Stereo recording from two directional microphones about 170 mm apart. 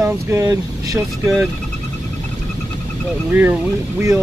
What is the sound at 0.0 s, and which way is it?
Speech, 15° right (ahead or behind).